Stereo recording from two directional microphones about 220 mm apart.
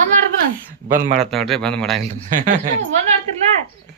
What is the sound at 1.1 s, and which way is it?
Speech, centre (ahead or behind).